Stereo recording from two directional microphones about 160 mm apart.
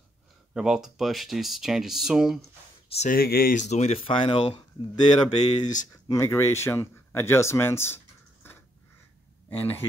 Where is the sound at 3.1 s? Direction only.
70° left (ahead or behind).